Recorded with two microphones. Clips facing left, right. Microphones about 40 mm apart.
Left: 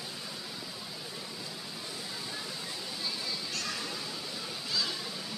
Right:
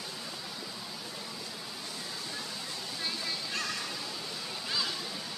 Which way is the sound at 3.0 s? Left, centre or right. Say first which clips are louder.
Right 1 dB; centre.